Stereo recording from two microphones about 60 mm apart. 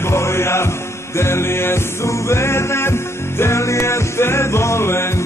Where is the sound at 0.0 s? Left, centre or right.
Left.